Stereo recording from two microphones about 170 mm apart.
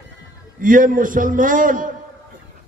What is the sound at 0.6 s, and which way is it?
A man's voice, 50° right (ahead or behind).